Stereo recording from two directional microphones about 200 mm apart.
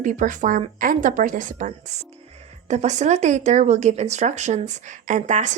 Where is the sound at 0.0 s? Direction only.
40° right (ahead or behind).